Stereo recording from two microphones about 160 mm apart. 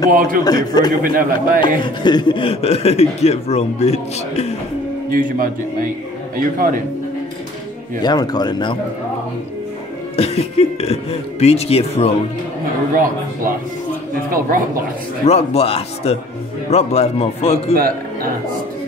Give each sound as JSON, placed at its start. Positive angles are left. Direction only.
{"t": 0.1, "sound": "music", "side_deg": -60}
{"t": 0.4, "sound": "a man's voice", "side_deg": 25}
{"t": 1.0, "sound": "music", "side_deg": -60}
{"t": 2.0, "sound": "a man's voice", "side_deg": 30}
{"t": 5.1, "sound": "music", "side_deg": -60}
{"t": 8.0, "sound": "a man's voice", "side_deg": 25}
{"t": 10.1, "sound": "a man's voice", "side_deg": 40}
{"t": 15.2, "sound": "a man's voice", "side_deg": 40}
{"t": 17.7, "sound": "a man's voice", "side_deg": -65}